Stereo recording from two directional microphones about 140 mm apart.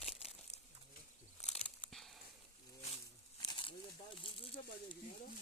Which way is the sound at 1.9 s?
Centre (ahead or behind).